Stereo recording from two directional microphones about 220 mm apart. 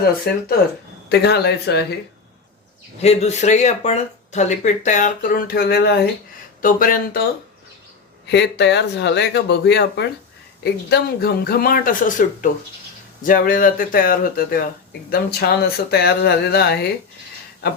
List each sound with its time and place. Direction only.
0.3 s speech: 50° left (ahead or behind)
3.0 s speech: 30° left (ahead or behind)
8.3 s speech: 50° left (ahead or behind)